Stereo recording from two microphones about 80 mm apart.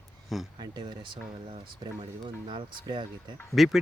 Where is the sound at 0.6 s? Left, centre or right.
Right.